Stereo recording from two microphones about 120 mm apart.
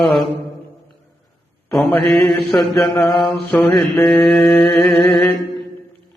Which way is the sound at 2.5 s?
20° left (ahead or behind).